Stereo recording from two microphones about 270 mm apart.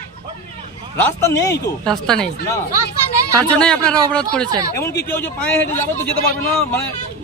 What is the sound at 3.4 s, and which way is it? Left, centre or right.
A man's voice, centre.